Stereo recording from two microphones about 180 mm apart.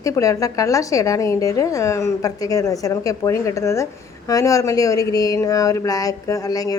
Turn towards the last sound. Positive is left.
turn(degrees=20)  # may be behind; listen again after turning